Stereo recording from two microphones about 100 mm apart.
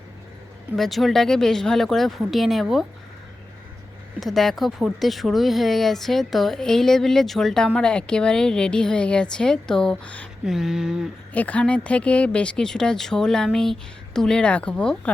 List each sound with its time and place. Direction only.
0.8 s speech: centre (ahead or behind)
4.2 s speech: centre (ahead or behind)
10.4 s speech: 5° right (ahead or behind)
11.3 s speech: 15° left (ahead or behind)